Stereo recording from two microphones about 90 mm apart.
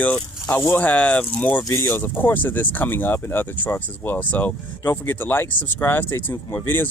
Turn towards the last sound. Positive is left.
turn(degrees=25)  # may be behind; listen again after turning